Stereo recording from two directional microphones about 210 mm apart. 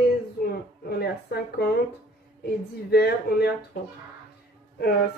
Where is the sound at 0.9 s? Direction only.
50° left (ahead or behind).